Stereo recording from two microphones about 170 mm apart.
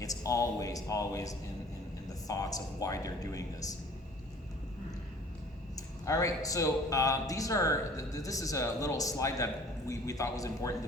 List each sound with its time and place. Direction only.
0.0 s a man's voice: 20° left (ahead or behind)
5.7 s a man's voice: 20° left (ahead or behind)